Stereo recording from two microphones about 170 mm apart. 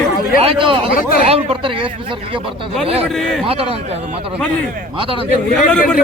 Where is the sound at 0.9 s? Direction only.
60° left (ahead or behind).